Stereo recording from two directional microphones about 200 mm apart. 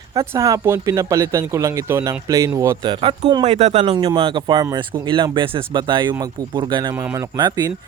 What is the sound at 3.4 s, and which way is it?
Speech, 35° right (ahead or behind).